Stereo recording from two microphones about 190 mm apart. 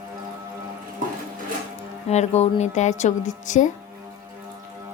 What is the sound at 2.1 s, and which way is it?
Speech, 35° left (ahead or behind).